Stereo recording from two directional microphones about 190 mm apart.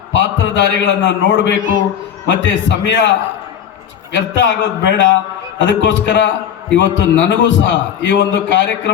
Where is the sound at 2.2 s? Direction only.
70° left (ahead or behind).